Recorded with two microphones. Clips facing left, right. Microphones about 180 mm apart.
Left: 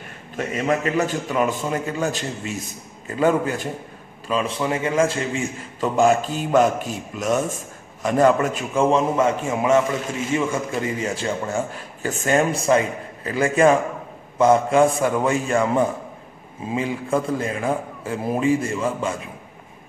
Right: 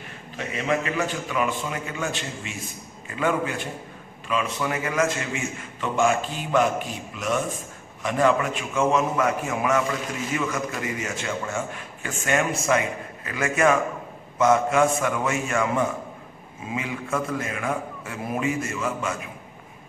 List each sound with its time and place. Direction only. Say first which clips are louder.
0.4 s a man's voice: left 4 dB; 45° left (ahead or behind)